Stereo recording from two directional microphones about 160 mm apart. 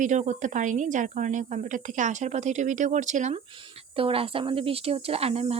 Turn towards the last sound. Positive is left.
turn(degrees=-40)  # may be behind; listen again after turning